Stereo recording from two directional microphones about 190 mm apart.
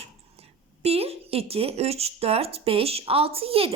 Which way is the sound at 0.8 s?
30° right (ahead or behind).